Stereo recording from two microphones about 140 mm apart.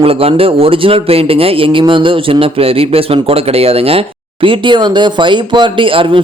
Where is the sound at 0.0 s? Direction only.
45° right (ahead or behind).